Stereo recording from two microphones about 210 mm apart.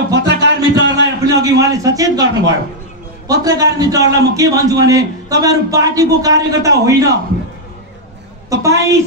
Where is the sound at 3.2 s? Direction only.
15° right (ahead or behind).